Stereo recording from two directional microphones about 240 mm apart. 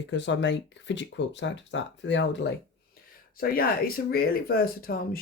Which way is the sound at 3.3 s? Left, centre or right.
Left.